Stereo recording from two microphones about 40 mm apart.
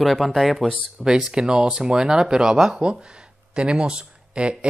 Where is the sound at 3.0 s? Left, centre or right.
Right.